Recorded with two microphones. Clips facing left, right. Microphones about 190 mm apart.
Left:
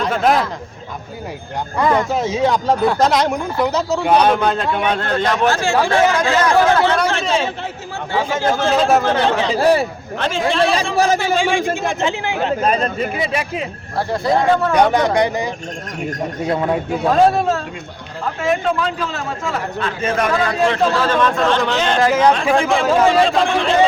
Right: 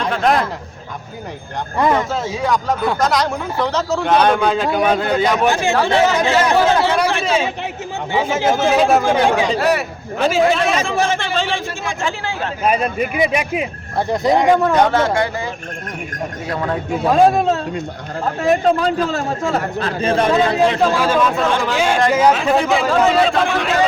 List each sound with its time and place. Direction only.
0.0 s a man's voice: centre (ahead or behind)
2.0 s speech: 20° left (ahead or behind)
3.9 s a man's voice: 5° left (ahead or behind)
5.5 s speech: 15° right (ahead or behind)
9.6 s speech: 30° left (ahead or behind)
10.2 s speech: 5° right (ahead or behind)
10.9 s speech: 40° left (ahead or behind)
11.5 s speech: 15° left (ahead or behind)
12.6 s speech: 10° right (ahead or behind)
14.7 s speech: 15° left (ahead or behind)
16.5 s speech: 20° left (ahead or behind)
16.9 s a man's voice: 5° right (ahead or behind)
18.4 s a man's voice: 40° right (ahead or behind); by 23.7 s 5° right (ahead or behind)